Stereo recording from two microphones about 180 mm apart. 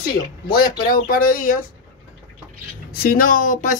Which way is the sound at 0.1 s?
55° left (ahead or behind).